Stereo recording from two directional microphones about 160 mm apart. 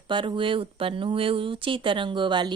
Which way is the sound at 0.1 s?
30° right (ahead or behind).